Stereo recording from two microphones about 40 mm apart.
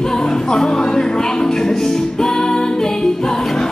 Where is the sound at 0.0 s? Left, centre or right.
Centre.